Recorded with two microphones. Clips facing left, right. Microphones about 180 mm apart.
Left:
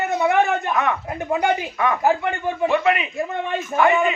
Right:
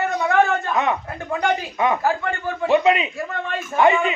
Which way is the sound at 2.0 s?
20° left (ahead or behind).